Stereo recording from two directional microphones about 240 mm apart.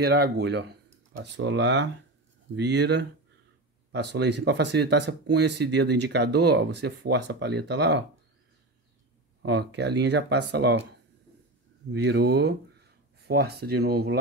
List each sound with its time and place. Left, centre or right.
0.0 s speech: right
9.4 s speech: right
11.9 s speech: right